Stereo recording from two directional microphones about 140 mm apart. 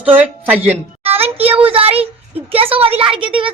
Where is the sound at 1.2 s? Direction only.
45° right (ahead or behind).